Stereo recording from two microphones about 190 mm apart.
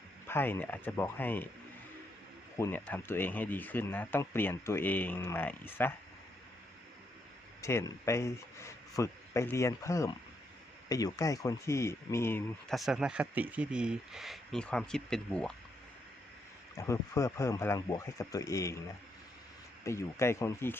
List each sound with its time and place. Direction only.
0.3 s speech: 10° left (ahead or behind)
2.6 s speech: 10° left (ahead or behind)
7.6 s speech: 15° left (ahead or behind)
12.7 s speech: centre (ahead or behind)
16.7 s speech: 15° left (ahead or behind)
19.8 s speech: 15° left (ahead or behind)